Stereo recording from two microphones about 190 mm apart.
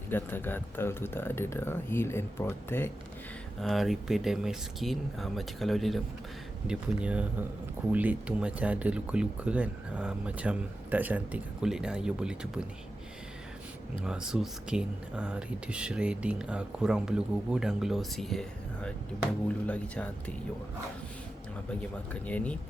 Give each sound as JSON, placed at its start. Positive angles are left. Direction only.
{"t": 0.1, "sound": "speech", "side_deg": 10}
{"t": 3.6, "sound": "speech", "side_deg": 0}
{"t": 14.0, "sound": "speech", "side_deg": -5}
{"t": 21.8, "sound": "speech", "side_deg": 5}